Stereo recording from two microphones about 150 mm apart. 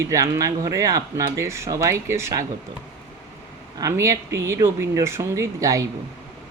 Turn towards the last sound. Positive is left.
turn(degrees=-20)  # may be behind; listen again after turning